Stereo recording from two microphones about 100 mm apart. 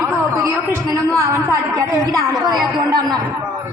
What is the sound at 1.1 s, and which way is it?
A woman's voice, 30° right (ahead or behind).